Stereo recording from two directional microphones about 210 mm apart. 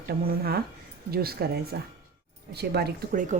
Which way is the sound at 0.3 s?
45° right (ahead or behind).